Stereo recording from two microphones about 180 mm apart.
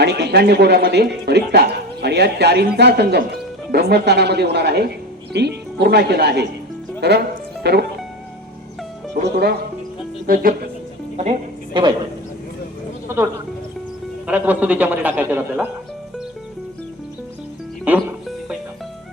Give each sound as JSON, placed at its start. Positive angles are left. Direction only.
{"t": 0.0, "sound": "speech", "side_deg": -65}
{"t": 9.2, "sound": "speech", "side_deg": -65}
{"t": 10.2, "sound": "speech", "side_deg": -55}
{"t": 11.2, "sound": "a woman's voice", "side_deg": -30}
{"t": 13.1, "sound": "a man's voice", "side_deg": -15}
{"t": 14.3, "sound": "a man's voice", "side_deg": -10}
{"t": 17.8, "sound": "music", "side_deg": -5}